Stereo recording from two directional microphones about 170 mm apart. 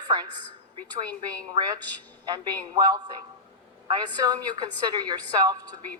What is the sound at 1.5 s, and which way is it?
Speech, 25° right (ahead or behind).